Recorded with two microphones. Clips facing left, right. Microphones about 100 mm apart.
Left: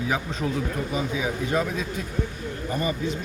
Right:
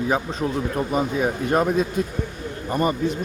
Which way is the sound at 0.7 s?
50° right (ahead or behind).